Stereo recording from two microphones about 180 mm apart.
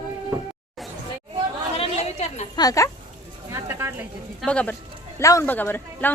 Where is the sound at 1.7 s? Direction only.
35° left (ahead or behind).